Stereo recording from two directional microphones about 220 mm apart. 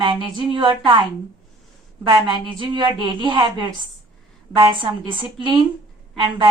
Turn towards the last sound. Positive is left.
turn(degrees=-20)  # may be behind; listen again after turning